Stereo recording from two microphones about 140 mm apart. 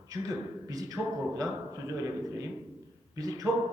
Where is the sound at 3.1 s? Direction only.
25° right (ahead or behind).